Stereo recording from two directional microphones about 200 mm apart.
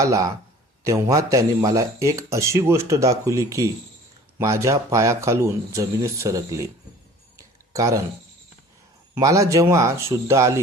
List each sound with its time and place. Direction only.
0.0 s speech: 15° right (ahead or behind)
7.3 s a sound: 15° right (ahead or behind)
9.1 s speech: 15° right (ahead or behind)